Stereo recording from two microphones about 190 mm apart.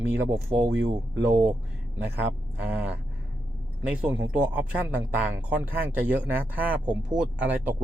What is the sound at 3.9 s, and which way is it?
Speech, 10° right (ahead or behind).